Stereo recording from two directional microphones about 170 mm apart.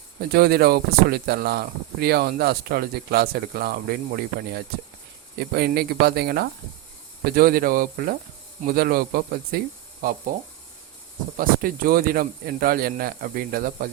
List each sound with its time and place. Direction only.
0.3 s speech: 65° right (ahead or behind)
11.3 s speech: 55° right (ahead or behind)